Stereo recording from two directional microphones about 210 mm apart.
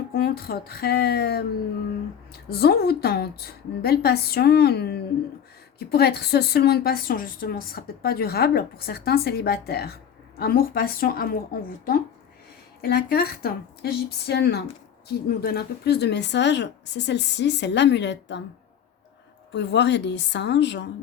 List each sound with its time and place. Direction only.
0.1 s a woman's voice: 45° left (ahead or behind)
2.5 s a woman's voice: 50° left (ahead or behind)
19.5 s speech: 55° left (ahead or behind)